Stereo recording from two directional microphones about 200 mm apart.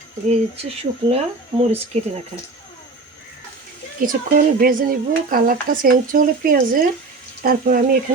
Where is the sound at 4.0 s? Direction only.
45° right (ahead or behind).